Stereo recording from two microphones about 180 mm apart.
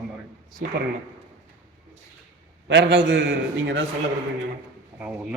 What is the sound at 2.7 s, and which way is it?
A man's voice, 75° right (ahead or behind).